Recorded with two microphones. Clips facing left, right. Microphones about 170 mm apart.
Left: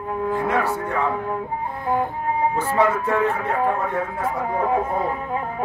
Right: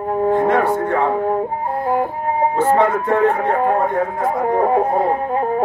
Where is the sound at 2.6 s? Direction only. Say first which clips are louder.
Right 7 dB; 35° right (ahead or behind).